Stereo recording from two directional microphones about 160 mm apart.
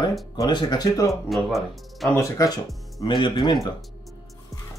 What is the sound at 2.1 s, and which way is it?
Speech, 20° left (ahead or behind).